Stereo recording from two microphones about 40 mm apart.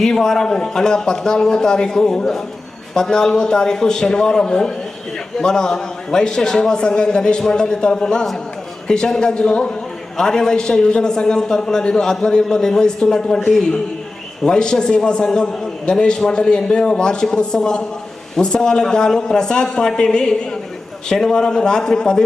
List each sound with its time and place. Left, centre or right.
0.0 s a man's voice: centre